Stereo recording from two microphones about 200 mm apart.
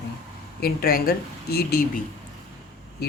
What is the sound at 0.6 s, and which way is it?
Speech, 45° left (ahead or behind).